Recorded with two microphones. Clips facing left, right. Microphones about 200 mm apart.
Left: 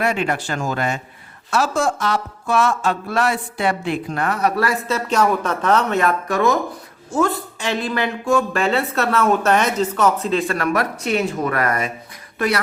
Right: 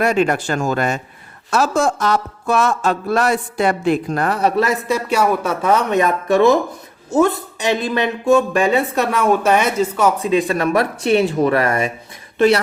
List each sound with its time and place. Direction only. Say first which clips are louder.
0.0 s speech: right 5 dB; 40° right (ahead or behind); by 11.9 s 25° right (ahead or behind)